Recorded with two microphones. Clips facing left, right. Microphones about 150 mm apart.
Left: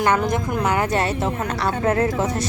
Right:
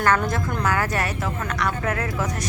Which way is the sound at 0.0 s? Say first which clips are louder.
Left 2 dB; 20° left (ahead or behind).